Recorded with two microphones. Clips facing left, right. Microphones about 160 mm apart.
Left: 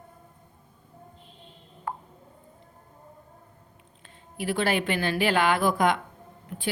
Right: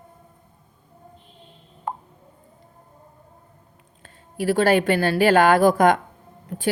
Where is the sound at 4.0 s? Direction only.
40° right (ahead or behind).